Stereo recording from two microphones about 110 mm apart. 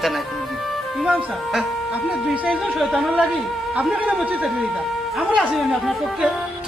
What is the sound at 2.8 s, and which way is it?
A man's voice, 5° right (ahead or behind).